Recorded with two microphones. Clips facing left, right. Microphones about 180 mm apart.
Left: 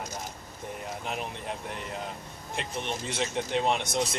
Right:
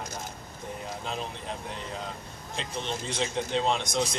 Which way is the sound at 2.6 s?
15° left (ahead or behind).